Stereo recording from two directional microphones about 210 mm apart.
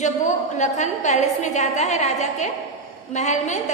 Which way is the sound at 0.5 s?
35° left (ahead or behind).